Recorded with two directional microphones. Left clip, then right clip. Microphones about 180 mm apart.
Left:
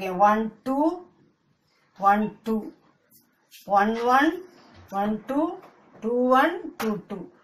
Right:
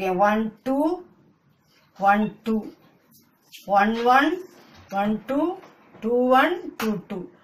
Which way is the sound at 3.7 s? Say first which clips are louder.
Right 2 dB; 10° right (ahead or behind).